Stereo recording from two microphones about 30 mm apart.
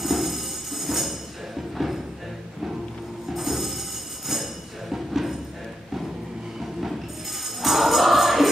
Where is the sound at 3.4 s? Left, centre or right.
Centre.